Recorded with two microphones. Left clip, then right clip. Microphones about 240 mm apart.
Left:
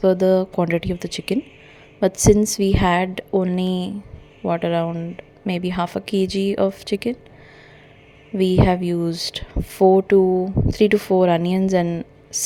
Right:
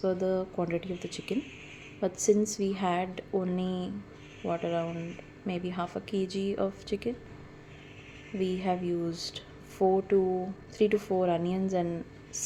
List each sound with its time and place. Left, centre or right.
0.0 s a woman's voice: left
8.4 s a woman's voice: left